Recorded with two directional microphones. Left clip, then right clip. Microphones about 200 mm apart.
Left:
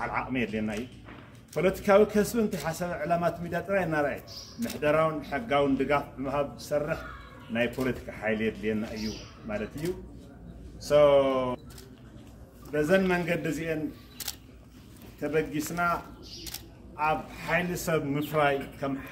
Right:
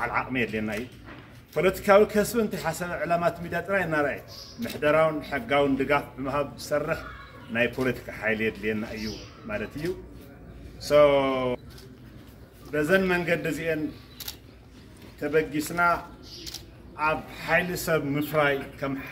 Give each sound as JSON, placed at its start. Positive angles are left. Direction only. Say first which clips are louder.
{"t": 0.0, "sound": "a man's voice", "louder": "right 4 dB", "side_deg": 0}
{"t": 12.7, "sound": "a man's voice", "louder": "right 2 dB", "side_deg": 0}
{"t": 14.2, "sound": "a sound", "louder": "left 1 dB", "side_deg": 50}
{"t": 15.1, "sound": "a man's voice", "louder": "right 4 dB", "side_deg": -5}